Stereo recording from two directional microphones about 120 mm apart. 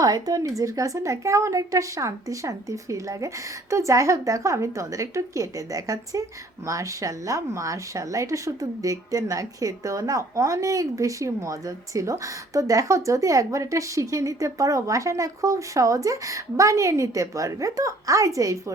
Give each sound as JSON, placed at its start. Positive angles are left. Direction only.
{"t": 0.0, "sound": "speech", "side_deg": -30}